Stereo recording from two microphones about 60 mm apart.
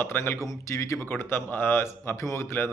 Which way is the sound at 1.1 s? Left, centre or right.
Left.